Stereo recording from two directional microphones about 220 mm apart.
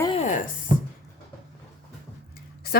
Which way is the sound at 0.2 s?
35° left (ahead or behind).